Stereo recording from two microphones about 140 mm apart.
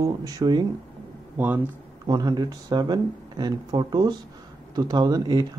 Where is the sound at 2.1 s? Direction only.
30° right (ahead or behind).